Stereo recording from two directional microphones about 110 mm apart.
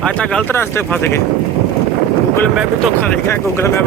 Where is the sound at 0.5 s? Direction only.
20° left (ahead or behind).